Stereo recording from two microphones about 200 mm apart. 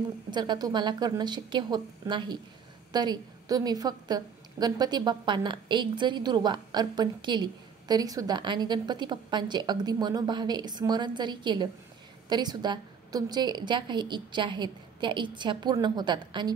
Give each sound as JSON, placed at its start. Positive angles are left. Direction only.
{"t": 0.3, "sound": "a woman's voice", "side_deg": -20}